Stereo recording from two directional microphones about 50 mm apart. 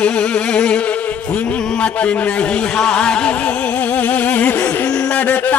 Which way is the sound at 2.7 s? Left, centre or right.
Centre.